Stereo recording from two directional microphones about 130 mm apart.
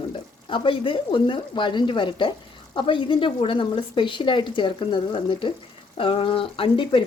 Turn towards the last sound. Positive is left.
turn(degrees=40)  # may be behind; listen again after turning